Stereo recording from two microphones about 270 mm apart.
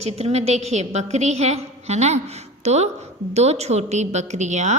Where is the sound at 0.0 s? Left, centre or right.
Right.